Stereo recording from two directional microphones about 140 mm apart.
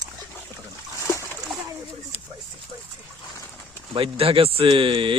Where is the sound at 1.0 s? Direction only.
20° left (ahead or behind).